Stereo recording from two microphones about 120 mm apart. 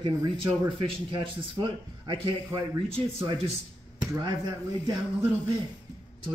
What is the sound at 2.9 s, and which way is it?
Speech, 55° right (ahead or behind).